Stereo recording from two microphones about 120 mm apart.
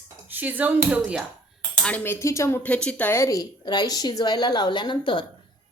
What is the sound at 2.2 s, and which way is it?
Speech, 25° left (ahead or behind).